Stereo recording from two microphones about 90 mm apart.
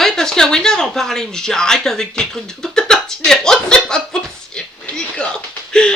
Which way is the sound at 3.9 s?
5° left (ahead or behind).